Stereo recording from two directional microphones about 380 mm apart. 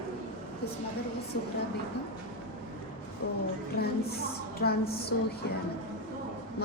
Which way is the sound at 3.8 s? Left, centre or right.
Left.